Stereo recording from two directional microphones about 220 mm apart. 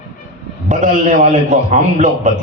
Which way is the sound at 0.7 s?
35° right (ahead or behind).